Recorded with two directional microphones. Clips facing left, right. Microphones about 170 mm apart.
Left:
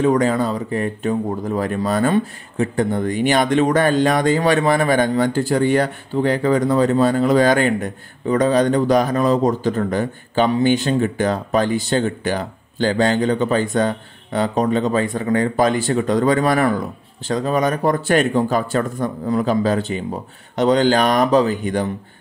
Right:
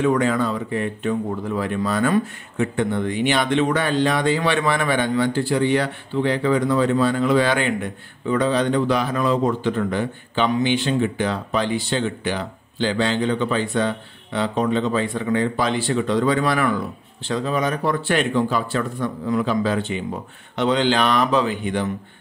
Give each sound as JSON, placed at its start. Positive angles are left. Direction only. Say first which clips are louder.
{"t": 0.0, "sound": "speech", "louder": "left 3 dB", "side_deg": 40}